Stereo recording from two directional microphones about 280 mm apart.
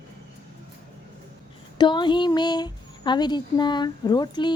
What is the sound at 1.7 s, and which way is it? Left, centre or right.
Speech, centre.